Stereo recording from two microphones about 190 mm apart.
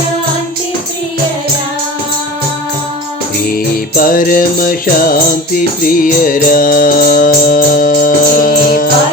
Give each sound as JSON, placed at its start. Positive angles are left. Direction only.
{"t": 3.3, "sound": "music", "side_deg": 50}